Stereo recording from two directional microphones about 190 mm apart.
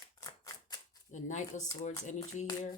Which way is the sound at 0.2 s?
20° left (ahead or behind).